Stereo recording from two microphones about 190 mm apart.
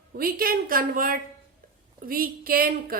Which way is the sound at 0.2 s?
50° right (ahead or behind).